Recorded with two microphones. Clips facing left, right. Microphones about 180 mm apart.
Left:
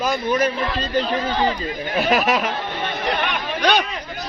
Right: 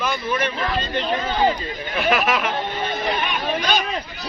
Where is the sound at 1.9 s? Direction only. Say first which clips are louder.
Left 1 dB; 35° left (ahead or behind).